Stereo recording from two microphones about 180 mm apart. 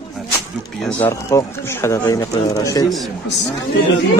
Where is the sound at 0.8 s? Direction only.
10° left (ahead or behind).